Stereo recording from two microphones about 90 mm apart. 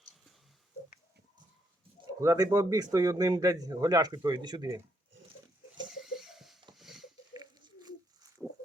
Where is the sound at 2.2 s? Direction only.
40° right (ahead or behind).